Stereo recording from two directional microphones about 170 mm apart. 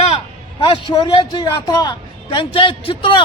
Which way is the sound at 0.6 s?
30° left (ahead or behind).